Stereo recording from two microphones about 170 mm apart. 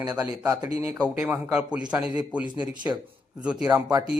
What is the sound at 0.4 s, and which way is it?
A man's voice, 15° right (ahead or behind).